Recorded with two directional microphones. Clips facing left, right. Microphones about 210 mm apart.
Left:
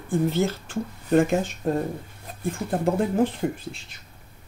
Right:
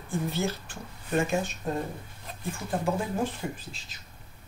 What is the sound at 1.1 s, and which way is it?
Speech, 55° left (ahead or behind).